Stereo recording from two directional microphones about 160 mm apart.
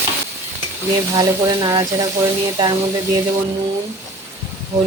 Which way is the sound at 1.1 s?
25° right (ahead or behind).